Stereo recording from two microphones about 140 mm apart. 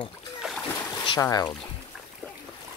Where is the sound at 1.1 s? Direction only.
25° left (ahead or behind).